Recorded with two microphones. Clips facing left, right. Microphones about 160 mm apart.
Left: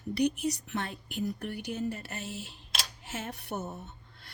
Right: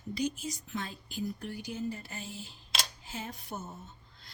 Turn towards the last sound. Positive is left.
turn(degrees=70)  # may be behind; listen again after turning